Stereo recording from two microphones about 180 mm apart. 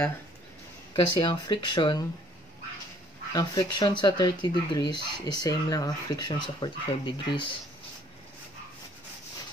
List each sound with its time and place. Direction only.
0.9 s speech: 20° left (ahead or behind)
3.3 s speech: 20° left (ahead or behind)